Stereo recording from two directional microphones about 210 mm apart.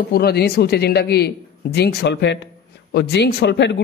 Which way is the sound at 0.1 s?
50° left (ahead or behind).